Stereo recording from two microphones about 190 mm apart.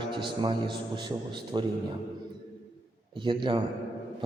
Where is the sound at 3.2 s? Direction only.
25° right (ahead or behind).